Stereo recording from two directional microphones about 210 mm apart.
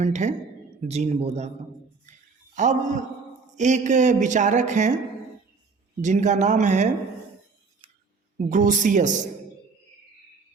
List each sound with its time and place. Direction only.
0.0 s speech: 35° right (ahead or behind)
2.6 s speech: 35° right (ahead or behind)
6.0 s speech: 35° right (ahead or behind)
8.4 s speech: 40° right (ahead or behind)